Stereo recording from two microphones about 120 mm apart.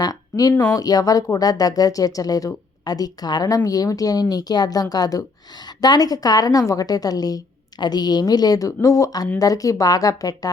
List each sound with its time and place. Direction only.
0.0 s a woman's voice: 30° left (ahead or behind)